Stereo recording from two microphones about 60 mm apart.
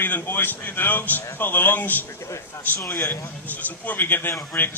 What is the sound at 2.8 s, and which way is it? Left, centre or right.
Speech, left.